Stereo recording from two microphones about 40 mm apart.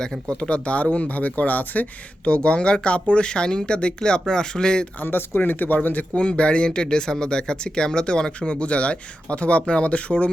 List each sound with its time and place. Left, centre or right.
0.3 s speech: left
2.2 s speech: left
5.0 s speech: left